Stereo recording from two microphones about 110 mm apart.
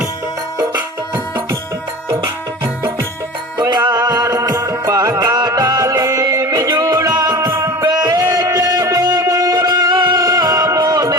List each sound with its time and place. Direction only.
3.6 s music: 40° right (ahead or behind); by 7.9 s 25° right (ahead or behind)
7.9 s music: 40° right (ahead or behind)